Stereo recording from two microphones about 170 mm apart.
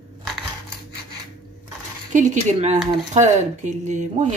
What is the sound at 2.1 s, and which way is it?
Speech, 45° right (ahead or behind).